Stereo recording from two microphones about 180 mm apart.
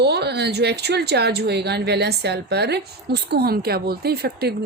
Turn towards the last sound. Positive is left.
turn(degrees=-60)  # may be behind; listen again after turning